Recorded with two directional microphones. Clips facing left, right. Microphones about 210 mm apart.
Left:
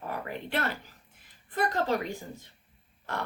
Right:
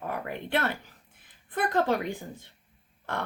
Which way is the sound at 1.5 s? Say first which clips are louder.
Right 2 dB; 55° right (ahead or behind).